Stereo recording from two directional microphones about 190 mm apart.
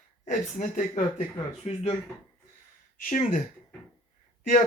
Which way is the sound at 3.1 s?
45° left (ahead or behind).